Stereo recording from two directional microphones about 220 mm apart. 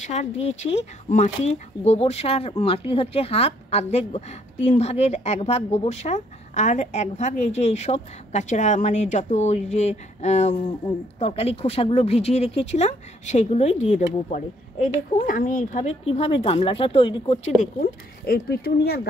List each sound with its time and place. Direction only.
0.0 s a woman's voice: 30° left (ahead or behind)
17.6 s speech: 45° left (ahead or behind)